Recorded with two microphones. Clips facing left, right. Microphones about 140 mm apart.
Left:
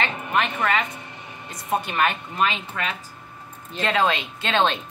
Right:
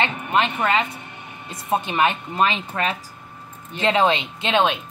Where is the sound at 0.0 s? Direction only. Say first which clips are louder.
Right 3 dB; 25° right (ahead or behind).